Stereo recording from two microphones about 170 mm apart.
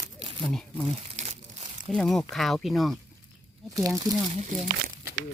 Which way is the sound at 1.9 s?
5° left (ahead or behind).